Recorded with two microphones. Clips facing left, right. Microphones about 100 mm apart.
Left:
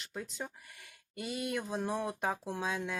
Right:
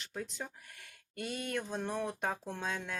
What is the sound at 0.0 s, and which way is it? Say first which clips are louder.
Speech: even; centre (ahead or behind).